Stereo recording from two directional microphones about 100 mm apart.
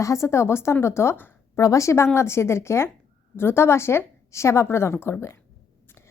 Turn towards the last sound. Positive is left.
turn(degrees=25)  # may be behind; listen again after turning